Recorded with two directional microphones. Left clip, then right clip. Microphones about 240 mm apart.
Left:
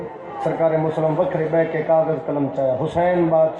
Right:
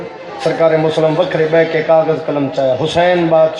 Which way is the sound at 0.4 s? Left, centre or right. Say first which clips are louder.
Right 7 dB; right.